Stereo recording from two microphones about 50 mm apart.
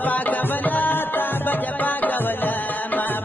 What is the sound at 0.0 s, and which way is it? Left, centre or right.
Music, left.